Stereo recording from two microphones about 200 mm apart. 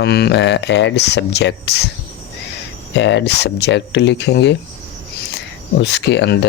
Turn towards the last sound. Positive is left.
turn(degrees=60)  # may be behind; listen again after turning